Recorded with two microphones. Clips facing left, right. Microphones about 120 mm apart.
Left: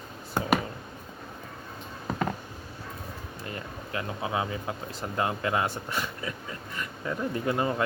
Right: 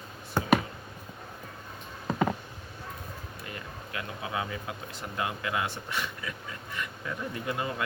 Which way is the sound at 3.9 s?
30° left (ahead or behind).